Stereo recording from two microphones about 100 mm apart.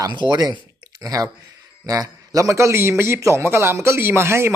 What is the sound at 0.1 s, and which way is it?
A man's voice, 45° right (ahead or behind).